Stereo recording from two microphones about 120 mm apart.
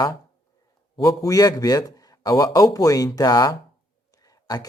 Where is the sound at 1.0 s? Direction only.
30° left (ahead or behind).